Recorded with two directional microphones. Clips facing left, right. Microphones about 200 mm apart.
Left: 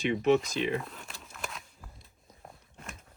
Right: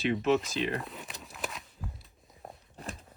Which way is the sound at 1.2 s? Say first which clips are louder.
Right 2 dB; centre (ahead or behind).